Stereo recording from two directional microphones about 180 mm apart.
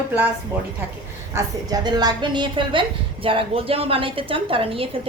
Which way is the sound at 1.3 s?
20° right (ahead or behind).